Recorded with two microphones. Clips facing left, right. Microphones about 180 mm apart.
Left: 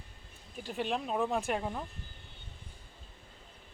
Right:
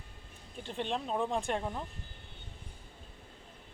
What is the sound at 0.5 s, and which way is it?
Speech, 5° left (ahead or behind).